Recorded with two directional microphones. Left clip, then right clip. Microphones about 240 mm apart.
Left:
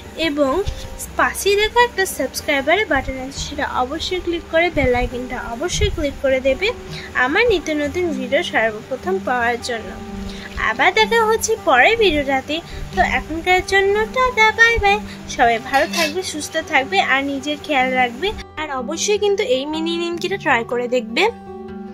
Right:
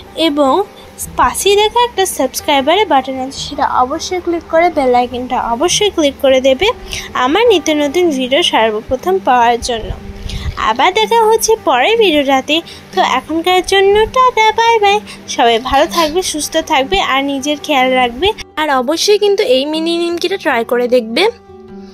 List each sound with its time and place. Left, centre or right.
0.2 s a woman's voice: centre